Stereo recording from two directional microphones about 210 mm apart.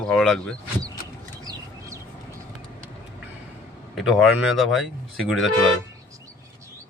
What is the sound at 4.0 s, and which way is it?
Speech, centre (ahead or behind).